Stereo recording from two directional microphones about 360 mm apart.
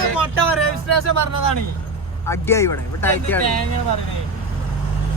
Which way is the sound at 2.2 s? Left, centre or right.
Centre.